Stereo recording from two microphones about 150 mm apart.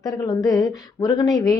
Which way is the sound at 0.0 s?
25° left (ahead or behind).